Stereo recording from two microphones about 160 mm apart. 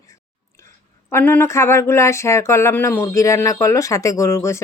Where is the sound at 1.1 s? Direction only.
15° left (ahead or behind).